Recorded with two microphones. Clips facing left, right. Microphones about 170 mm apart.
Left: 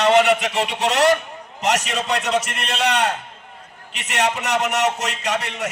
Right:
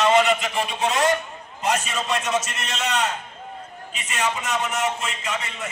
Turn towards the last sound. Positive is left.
turn(degrees=70)  # may be behind; listen again after turning